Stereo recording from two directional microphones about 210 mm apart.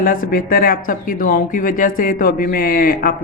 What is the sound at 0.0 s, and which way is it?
Speech, 40° left (ahead or behind).